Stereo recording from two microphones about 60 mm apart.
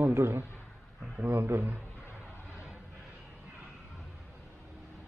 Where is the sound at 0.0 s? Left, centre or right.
Right.